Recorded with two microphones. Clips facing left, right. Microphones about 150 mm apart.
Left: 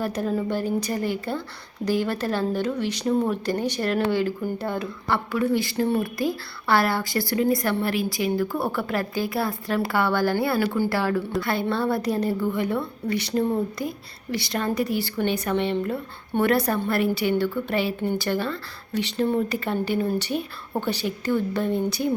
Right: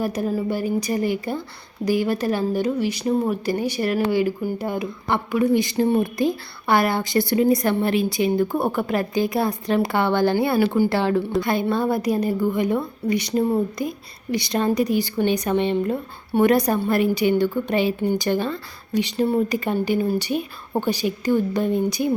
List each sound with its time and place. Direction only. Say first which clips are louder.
0.0 s a woman's voice: right 2 dB; 10° right (ahead or behind)